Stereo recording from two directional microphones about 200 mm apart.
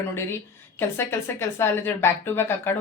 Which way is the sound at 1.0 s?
10° left (ahead or behind).